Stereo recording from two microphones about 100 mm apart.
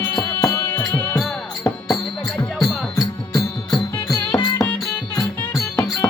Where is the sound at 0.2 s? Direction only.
30° left (ahead or behind).